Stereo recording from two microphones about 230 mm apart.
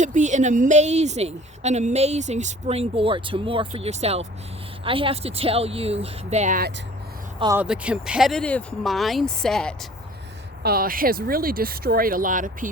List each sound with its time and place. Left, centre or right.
0.0 s speech: right
7.3 s speech: centre
7.6 s speech: centre
10.6 s speech: right